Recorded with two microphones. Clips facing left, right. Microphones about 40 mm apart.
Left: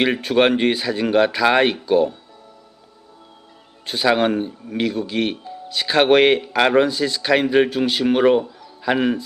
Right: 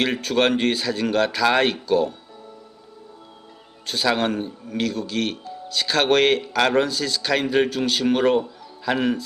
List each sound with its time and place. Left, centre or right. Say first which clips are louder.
0.0 s speech: left 4 dB; centre
3.8 s speech: left 4 dB; centre